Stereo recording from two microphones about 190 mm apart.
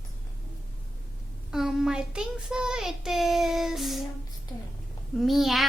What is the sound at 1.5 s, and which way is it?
Child singing, centre (ahead or behind).